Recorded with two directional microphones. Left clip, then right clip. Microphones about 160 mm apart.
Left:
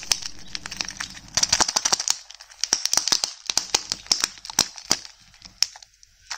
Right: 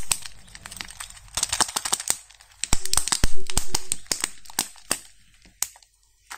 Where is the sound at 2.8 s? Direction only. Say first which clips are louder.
Left 4 dB; 30° left (ahead or behind).